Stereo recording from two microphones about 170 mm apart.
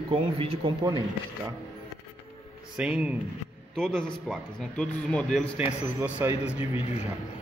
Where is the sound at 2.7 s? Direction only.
5° right (ahead or behind).